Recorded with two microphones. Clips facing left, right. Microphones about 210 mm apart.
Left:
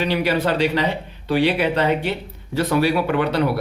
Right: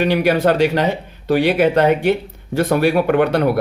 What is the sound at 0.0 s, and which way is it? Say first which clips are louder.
A man's voice: right 5 dB; 50° right (ahead or behind).